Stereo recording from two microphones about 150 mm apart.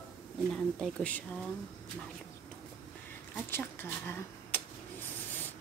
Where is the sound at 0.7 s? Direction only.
5° left (ahead or behind).